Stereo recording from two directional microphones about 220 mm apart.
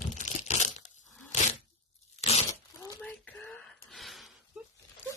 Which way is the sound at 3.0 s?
5° left (ahead or behind).